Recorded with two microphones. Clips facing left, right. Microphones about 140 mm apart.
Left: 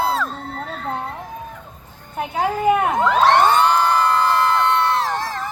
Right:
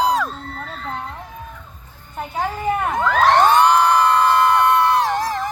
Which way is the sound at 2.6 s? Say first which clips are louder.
Left 5 dB; 15° left (ahead or behind).